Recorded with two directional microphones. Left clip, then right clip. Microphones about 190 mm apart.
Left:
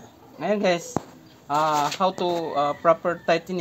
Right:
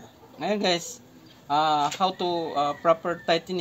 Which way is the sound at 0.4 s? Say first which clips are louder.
Left 3 dB; 25° left (ahead or behind).